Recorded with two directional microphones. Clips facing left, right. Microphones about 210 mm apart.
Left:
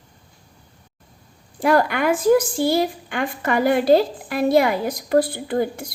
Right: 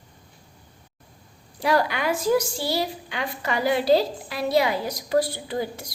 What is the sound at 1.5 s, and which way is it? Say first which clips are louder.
A woman's voice: left 4 dB; 50° left (ahead or behind).